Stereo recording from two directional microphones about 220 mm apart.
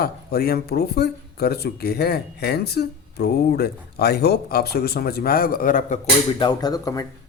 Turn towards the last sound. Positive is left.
turn(degrees=15)  # may be behind; listen again after turning